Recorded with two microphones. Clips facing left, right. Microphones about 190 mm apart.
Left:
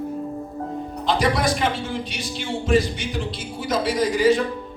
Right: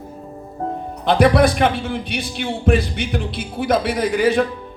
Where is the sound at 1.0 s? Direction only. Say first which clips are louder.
Right 7 dB; 60° right (ahead or behind).